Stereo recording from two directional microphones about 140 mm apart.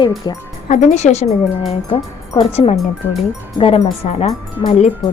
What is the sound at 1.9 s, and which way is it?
Speech, 40° left (ahead or behind).